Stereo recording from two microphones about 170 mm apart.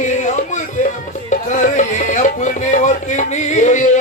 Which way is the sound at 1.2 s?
45° left (ahead or behind).